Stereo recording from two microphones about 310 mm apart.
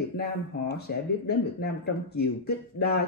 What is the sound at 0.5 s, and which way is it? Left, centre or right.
Speech, left.